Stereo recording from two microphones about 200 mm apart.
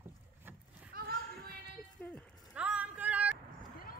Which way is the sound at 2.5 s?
5° right (ahead or behind).